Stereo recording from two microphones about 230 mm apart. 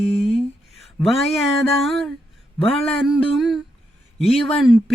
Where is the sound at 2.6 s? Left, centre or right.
Left.